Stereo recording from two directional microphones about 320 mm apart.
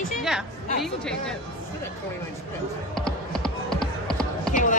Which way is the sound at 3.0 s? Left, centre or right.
Centre.